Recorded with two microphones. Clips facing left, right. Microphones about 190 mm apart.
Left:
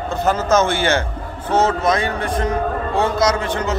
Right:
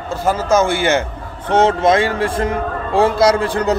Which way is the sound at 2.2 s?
30° right (ahead or behind).